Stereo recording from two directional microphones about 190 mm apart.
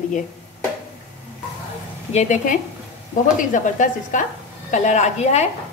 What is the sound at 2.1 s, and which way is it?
A woman's voice, 40° left (ahead or behind).